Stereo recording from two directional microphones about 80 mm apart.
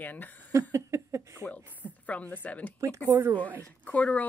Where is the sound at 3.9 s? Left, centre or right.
Centre.